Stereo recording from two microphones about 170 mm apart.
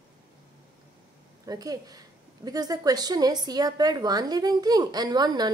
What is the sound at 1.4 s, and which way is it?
Speech, 20° right (ahead or behind).